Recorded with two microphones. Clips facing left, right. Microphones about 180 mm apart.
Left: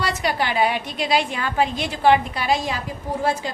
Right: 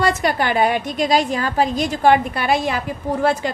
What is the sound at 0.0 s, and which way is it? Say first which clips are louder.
A woman's voice: right 5 dB; 50° right (ahead or behind).